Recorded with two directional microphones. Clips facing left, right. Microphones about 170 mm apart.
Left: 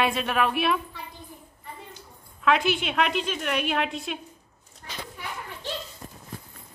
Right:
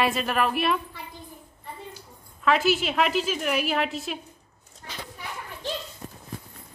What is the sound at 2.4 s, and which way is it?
Speech, centre (ahead or behind).